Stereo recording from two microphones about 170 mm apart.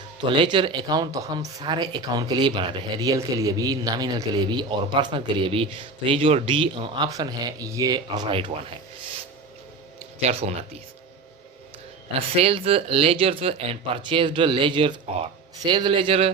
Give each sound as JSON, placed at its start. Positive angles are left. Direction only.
{"t": 0.3, "sound": "speech", "side_deg": -30}
{"t": 10.2, "sound": "speech", "side_deg": -40}
{"t": 12.4, "sound": "speech", "side_deg": -35}